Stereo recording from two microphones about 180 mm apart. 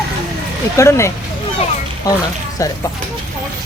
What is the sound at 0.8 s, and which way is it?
Speech, 15° left (ahead or behind).